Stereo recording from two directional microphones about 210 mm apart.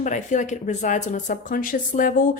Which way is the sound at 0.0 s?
35° left (ahead or behind).